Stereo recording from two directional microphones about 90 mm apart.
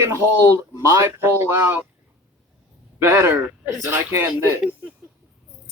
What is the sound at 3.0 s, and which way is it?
Speech, 30° right (ahead or behind).